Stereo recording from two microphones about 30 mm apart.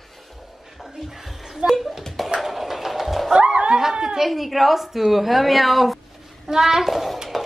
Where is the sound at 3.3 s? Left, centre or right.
Right.